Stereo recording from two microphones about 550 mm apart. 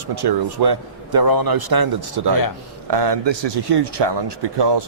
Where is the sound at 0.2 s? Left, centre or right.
Right.